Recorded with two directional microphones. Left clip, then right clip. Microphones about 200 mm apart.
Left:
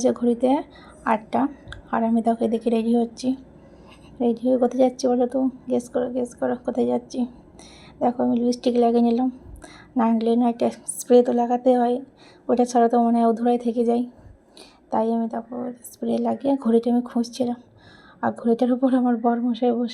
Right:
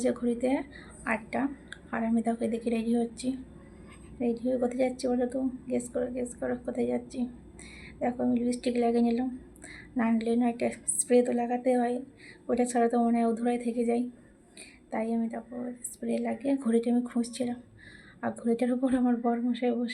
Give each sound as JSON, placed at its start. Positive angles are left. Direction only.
{"t": 0.0, "sound": "a woman's voice", "side_deg": 25}